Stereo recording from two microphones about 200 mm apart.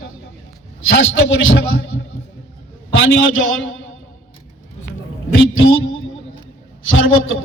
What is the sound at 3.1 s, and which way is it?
Speech, 90° left.